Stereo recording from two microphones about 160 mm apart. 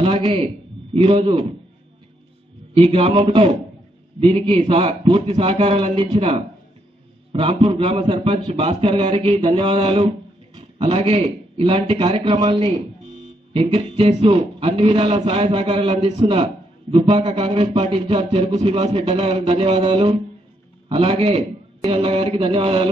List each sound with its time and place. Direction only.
0.0 s a man's voice: 35° right (ahead or behind)
2.7 s a man's voice: 35° right (ahead or behind)
16.2 s a man's voice: 25° right (ahead or behind)